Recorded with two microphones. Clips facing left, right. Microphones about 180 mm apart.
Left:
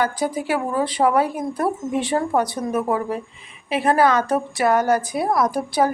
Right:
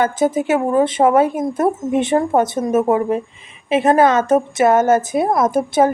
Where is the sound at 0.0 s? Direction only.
25° right (ahead or behind).